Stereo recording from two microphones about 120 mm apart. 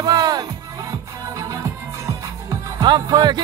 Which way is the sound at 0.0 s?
35° right (ahead or behind).